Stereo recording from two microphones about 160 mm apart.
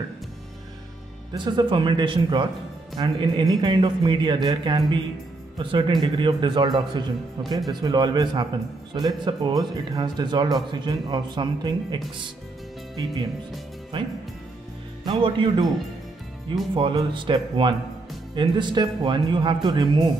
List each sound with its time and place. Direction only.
1.3 s a man's voice: 30° right (ahead or behind)
15.0 s speech: 30° right (ahead or behind)
16.7 s a man's voice: 30° right (ahead or behind)